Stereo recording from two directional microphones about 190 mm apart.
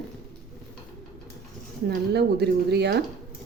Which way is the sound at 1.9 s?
55° right (ahead or behind).